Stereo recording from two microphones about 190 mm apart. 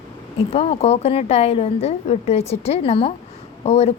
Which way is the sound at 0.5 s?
35° left (ahead or behind).